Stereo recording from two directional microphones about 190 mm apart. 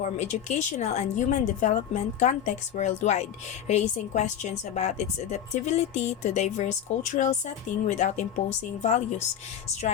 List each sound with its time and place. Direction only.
0.0 s speech: 35° left (ahead or behind)